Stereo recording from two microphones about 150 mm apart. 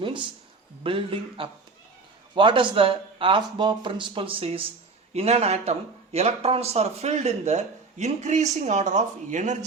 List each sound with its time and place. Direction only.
0.0 s speech: 35° right (ahead or behind); by 9.6 s 55° right (ahead or behind)